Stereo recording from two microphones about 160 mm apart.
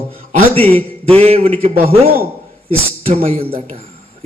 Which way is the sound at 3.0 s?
40° right (ahead or behind).